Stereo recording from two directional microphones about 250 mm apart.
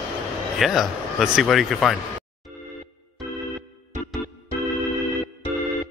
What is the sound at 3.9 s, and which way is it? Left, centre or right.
Music, right.